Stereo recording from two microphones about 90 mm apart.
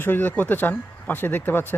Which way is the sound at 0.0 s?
20° left (ahead or behind).